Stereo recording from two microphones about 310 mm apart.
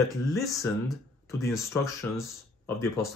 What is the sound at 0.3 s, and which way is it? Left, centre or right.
Speech, centre.